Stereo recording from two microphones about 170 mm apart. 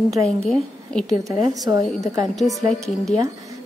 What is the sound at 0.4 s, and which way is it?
Speech, 5° left (ahead or behind).